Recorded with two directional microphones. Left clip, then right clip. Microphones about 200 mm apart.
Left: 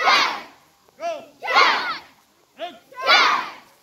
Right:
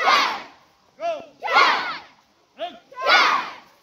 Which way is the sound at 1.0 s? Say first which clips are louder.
Right 1 dB; 50° right (ahead or behind).